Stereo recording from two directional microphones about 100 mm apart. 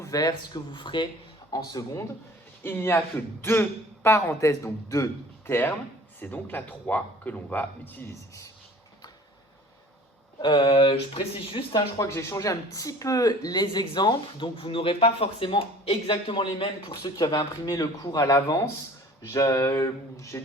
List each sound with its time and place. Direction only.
0.0 s speech: 40° left (ahead or behind)
2.6 s a man's voice: 20° left (ahead or behind)
10.4 s speech: 50° left (ahead or behind)
11.9 s speech: 30° left (ahead or behind)